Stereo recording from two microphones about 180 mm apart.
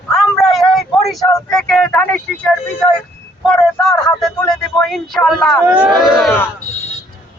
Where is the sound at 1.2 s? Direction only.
20° left (ahead or behind).